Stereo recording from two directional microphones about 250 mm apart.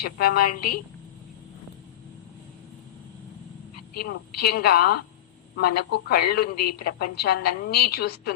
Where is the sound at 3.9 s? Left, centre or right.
Left.